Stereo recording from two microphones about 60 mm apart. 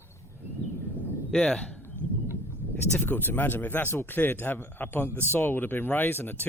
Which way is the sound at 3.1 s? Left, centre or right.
Left.